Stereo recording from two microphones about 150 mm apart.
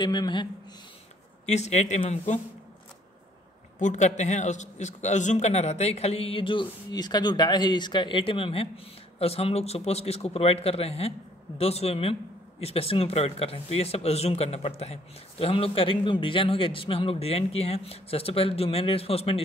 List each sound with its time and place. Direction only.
0.0 s speech: 30° left (ahead or behind)
1.4 s speech: 50° left (ahead or behind)
3.8 s a man's voice: 55° left (ahead or behind)